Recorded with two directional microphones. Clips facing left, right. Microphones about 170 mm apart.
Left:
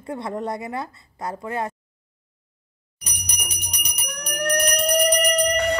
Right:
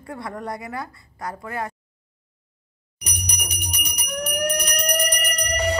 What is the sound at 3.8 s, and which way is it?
Jingle bell, centre (ahead or behind).